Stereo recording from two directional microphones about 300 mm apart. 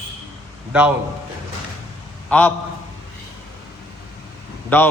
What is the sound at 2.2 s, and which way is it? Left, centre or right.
Speech, centre.